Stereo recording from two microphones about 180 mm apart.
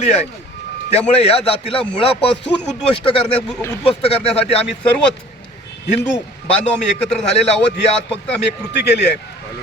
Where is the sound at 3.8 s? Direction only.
35° left (ahead or behind).